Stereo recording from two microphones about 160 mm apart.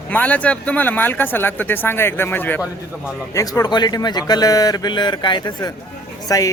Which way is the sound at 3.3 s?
20° left (ahead or behind).